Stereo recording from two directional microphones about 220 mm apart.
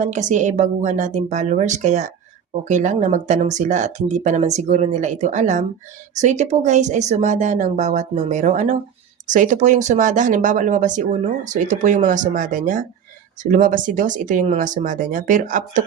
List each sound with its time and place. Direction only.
0.0 s speech: 35° right (ahead or behind)